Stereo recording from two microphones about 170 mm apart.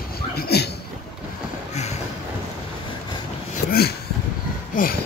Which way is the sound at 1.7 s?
40° left (ahead or behind).